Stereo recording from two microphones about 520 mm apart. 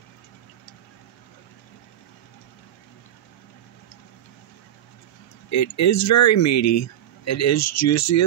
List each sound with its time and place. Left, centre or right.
5.5 s speech: left